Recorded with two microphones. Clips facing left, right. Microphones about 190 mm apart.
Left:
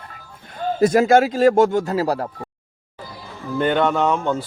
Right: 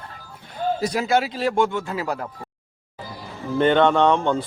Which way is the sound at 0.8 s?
50° left (ahead or behind).